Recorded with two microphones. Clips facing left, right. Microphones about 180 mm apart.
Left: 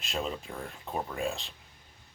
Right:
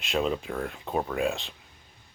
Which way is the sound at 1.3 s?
Centre (ahead or behind).